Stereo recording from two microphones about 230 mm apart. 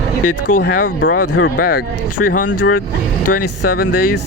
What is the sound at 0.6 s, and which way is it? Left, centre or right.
Speech, left.